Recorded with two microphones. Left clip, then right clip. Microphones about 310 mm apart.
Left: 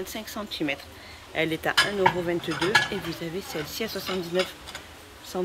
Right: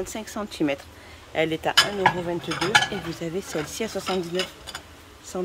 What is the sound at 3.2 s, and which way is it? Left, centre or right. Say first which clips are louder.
Speech: right 3 dB; centre.